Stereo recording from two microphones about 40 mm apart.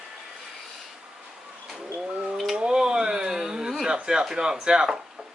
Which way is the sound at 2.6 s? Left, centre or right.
Right.